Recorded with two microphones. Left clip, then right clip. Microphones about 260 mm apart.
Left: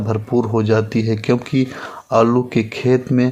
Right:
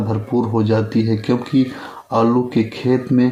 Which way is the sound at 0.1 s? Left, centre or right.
Left.